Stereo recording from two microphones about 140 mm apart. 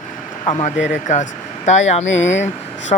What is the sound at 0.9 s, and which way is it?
Speech, 60° left (ahead or behind).